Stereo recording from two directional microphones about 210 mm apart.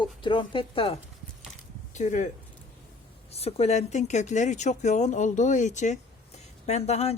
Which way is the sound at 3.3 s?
30° left (ahead or behind).